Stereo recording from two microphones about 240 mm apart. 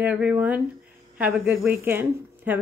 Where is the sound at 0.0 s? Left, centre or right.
Centre.